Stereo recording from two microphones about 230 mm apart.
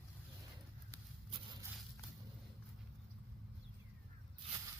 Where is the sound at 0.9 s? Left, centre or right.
Centre.